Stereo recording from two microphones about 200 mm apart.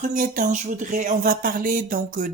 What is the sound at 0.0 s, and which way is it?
Speech, 40° right (ahead or behind).